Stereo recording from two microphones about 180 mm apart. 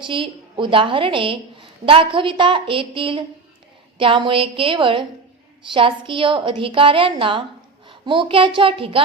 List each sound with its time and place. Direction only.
0.0 s a woman's voice: 30° right (ahead or behind)